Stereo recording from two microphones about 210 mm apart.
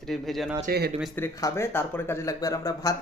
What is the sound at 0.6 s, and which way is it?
Speech, 50° right (ahead or behind).